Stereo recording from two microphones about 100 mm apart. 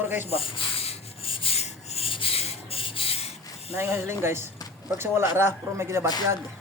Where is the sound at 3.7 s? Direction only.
25° right (ahead or behind).